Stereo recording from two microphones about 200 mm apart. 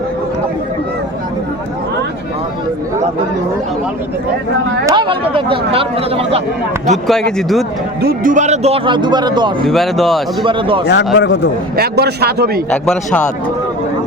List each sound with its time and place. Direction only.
4.9 s a man's voice: 25° right (ahead or behind)
6.9 s speech: centre (ahead or behind)
8.0 s a man's voice: 40° right (ahead or behind); by 9.6 s 20° right (ahead or behind)
9.6 s speech: centre (ahead or behind)
10.4 s a man's voice: 25° right (ahead or behind)
10.8 s speech: 60° left (ahead or behind)
11.8 s speech: 55° right (ahead or behind)
12.7 s speech: 5° left (ahead or behind)